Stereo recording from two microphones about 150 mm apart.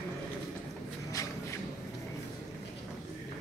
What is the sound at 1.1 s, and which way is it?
Shuffle, 20° left (ahead or behind).